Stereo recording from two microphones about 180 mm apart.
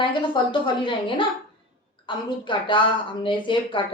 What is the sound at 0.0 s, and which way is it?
A woman's voice, 25° left (ahead or behind).